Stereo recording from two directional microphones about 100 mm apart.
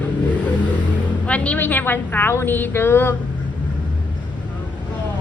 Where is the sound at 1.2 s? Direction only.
15° left (ahead or behind).